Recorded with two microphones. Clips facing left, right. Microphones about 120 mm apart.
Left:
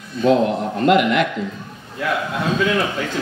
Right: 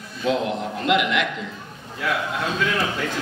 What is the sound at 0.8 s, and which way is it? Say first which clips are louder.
Speech: left 6 dB; 45° left (ahead or behind).